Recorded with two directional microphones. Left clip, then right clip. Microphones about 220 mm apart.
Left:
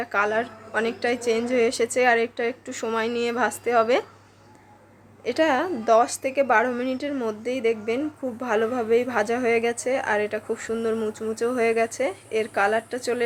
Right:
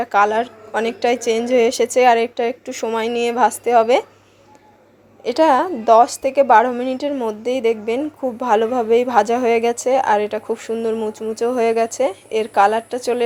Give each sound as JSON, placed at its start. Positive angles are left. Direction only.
{"t": 0.0, "sound": "a woman's voice", "side_deg": -20}
{"t": 5.2, "sound": "a woman's voice", "side_deg": -20}